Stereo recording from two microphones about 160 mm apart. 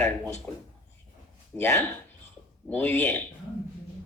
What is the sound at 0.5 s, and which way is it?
Speech, 10° left (ahead or behind).